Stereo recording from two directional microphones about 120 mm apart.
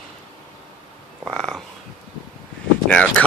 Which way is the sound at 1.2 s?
5° left (ahead or behind).